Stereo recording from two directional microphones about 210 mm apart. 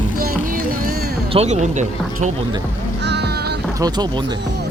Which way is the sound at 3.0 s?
55° right (ahead or behind).